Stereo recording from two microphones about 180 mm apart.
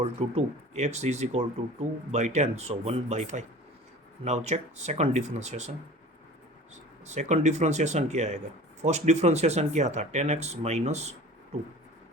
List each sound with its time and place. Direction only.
0.0 s speech: 35° right (ahead or behind)
7.1 s speech: 40° right (ahead or behind)